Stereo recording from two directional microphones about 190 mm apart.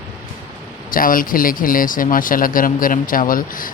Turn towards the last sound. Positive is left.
turn(degrees=45)  # may be behind; listen again after turning